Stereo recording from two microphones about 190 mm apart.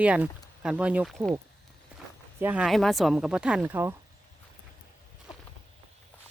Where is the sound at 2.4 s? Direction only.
5° right (ahead or behind).